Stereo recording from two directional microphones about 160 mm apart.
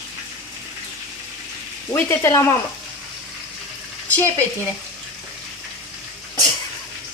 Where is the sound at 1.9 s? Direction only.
20° left (ahead or behind).